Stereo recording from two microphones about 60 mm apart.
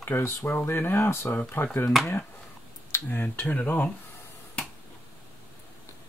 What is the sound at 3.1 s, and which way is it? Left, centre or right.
Speech, left.